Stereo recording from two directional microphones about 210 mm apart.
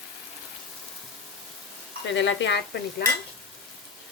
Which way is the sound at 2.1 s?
60° left (ahead or behind).